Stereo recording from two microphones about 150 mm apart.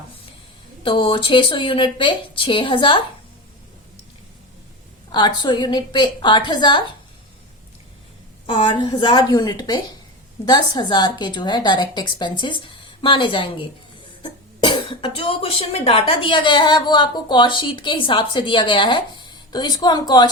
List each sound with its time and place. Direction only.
0.8 s speech: 35° left (ahead or behind)
5.1 s speech: 30° left (ahead or behind)
8.5 s a woman's voice: 35° left (ahead or behind)